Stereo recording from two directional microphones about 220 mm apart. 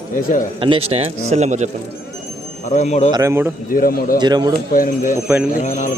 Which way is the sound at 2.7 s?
30° left (ahead or behind).